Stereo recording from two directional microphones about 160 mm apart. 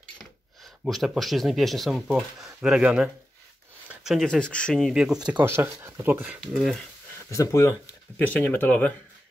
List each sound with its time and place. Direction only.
0.2 s speech: centre (ahead or behind)
5.4 s speech: 15° right (ahead or behind)
6.4 s speech: centre (ahead or behind)
7.2 s speech: 20° left (ahead or behind)